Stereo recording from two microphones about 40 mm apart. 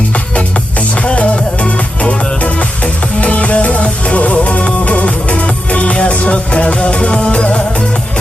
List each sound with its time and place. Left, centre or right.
0.3 s music: left